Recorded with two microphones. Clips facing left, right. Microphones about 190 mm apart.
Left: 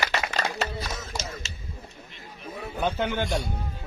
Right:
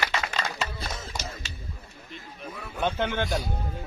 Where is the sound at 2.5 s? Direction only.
35° left (ahead or behind).